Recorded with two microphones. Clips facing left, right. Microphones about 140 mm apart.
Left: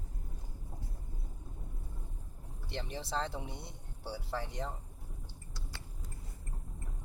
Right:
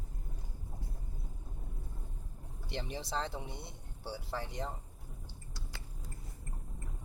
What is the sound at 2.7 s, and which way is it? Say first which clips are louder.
Speech: even; 5° right (ahead or behind).